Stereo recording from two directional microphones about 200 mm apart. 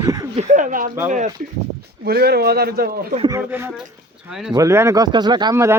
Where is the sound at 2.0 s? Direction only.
50° right (ahead or behind).